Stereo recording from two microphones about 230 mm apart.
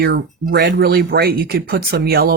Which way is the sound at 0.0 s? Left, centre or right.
Right.